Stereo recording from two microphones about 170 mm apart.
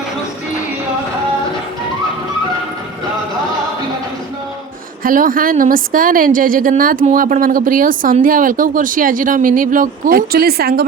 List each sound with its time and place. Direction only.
5.0 s a woman's voice: 55° right (ahead or behind)